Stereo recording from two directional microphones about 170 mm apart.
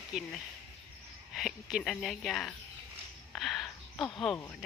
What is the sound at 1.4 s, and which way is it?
Speech, centre (ahead or behind).